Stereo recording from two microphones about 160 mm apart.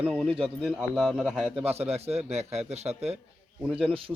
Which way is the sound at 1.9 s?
40° right (ahead or behind).